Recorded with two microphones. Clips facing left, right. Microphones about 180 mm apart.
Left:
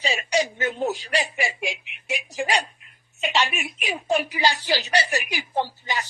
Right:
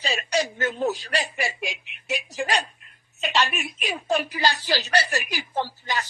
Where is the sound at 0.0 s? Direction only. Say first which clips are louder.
Left 2 dB; 15° left (ahead or behind).